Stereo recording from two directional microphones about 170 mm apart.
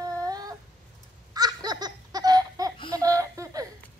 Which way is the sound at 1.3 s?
25° right (ahead or behind).